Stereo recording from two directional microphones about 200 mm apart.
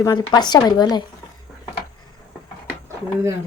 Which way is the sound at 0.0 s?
20° left (ahead or behind).